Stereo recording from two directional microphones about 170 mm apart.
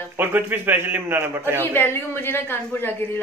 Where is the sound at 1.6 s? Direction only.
15° left (ahead or behind).